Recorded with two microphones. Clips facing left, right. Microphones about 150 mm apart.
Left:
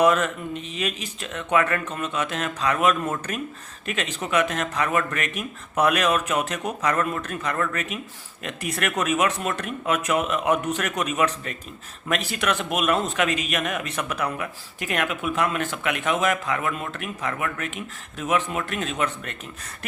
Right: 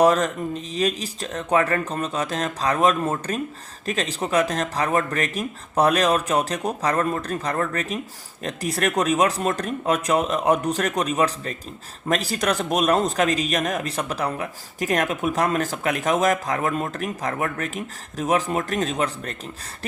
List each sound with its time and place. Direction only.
0.0 s a man's voice: 35° right (ahead or behind)